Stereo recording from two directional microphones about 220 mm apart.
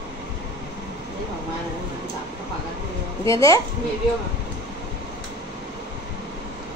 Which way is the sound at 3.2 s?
15° left (ahead or behind).